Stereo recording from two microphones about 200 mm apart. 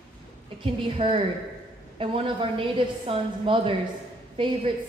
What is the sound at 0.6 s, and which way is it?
A woman's voice, 25° right (ahead or behind).